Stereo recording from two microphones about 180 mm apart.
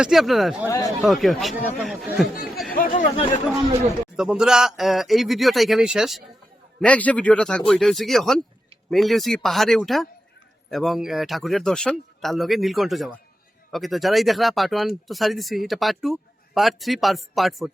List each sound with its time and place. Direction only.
0.0 s a man's voice: centre (ahead or behind)
2.7 s speech: 50° left (ahead or behind)
4.2 s a man's voice: 5° right (ahead or behind)